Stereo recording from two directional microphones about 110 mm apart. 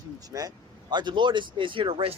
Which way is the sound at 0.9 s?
45° right (ahead or behind).